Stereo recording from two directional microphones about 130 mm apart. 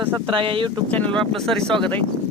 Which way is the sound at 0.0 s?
40° right (ahead or behind).